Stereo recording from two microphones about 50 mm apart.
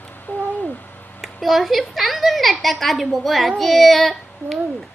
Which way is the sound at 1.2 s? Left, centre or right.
Centre.